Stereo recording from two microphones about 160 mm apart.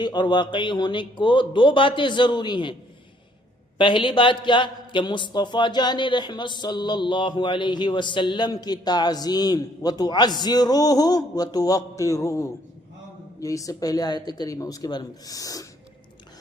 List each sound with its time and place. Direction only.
0.0 s a man's voice: 30° left (ahead or behind)
3.8 s a man's voice: 30° left (ahead or behind)